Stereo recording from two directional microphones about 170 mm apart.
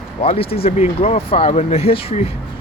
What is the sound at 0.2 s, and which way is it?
Speech, 35° left (ahead or behind).